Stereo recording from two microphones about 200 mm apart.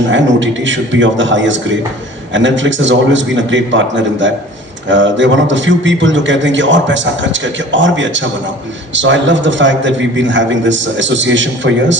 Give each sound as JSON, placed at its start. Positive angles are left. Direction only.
{"t": 0.1, "sound": "a man's voice", "side_deg": -65}